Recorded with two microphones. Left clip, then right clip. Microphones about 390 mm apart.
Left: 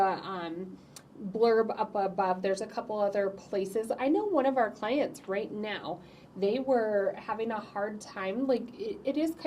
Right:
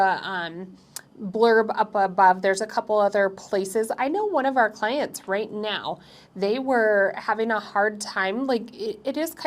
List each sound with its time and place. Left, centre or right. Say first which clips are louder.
0.0 s a woman's voice: right 7 dB; right